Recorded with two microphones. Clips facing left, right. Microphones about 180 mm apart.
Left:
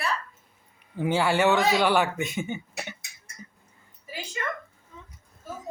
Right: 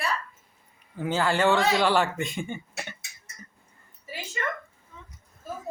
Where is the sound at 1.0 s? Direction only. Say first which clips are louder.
Left 1 dB; 10° left (ahead or behind).